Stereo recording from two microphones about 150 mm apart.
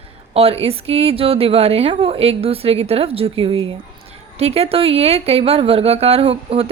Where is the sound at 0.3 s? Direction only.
40° right (ahead or behind).